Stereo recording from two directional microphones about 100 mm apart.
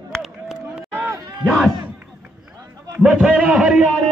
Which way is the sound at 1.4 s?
5° right (ahead or behind).